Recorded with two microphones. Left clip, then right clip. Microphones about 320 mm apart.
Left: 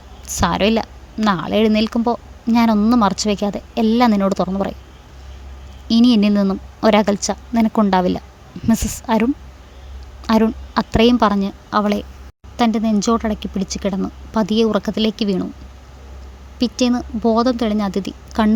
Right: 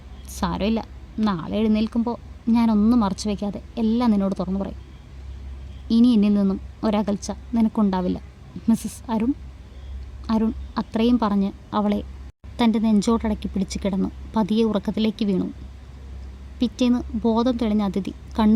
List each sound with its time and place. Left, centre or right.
0.3 s a woman's voice: centre
5.9 s a woman's voice: left
16.6 s a woman's voice: centre